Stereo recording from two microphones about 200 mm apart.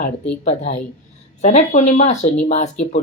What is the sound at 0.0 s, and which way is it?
Speech, 35° left (ahead or behind).